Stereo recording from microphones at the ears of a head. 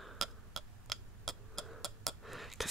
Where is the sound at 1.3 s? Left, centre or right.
Centre.